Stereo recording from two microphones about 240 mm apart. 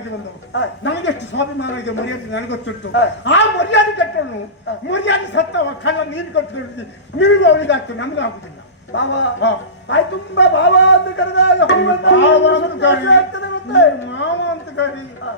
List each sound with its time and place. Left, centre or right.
0.5 s speech: left